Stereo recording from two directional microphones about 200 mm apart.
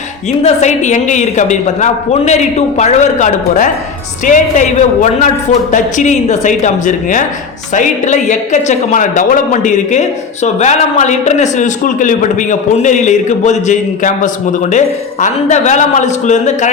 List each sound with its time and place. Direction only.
0.3 s speech: 35° left (ahead or behind)